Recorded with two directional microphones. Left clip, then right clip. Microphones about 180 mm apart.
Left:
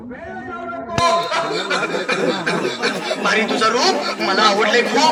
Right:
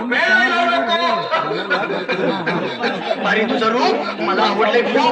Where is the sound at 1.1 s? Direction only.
90° left.